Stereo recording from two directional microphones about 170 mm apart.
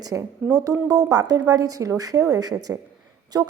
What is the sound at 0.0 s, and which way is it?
A woman's voice, 20° right (ahead or behind).